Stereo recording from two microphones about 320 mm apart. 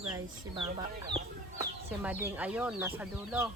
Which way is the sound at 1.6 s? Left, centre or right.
Centre.